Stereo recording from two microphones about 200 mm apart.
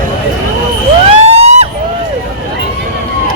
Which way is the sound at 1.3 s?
30° right (ahead or behind).